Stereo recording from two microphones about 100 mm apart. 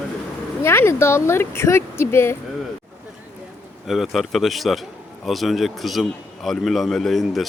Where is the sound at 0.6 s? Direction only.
25° left (ahead or behind).